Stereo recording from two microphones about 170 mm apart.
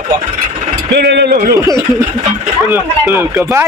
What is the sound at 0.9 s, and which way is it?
Speech, 85° right.